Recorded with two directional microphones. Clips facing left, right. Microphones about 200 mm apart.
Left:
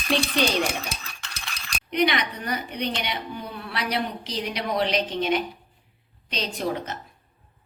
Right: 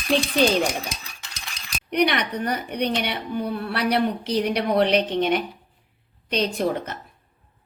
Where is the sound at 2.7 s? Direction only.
55° right (ahead or behind).